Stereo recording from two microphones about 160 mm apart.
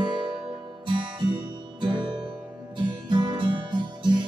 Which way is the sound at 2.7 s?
30° right (ahead or behind).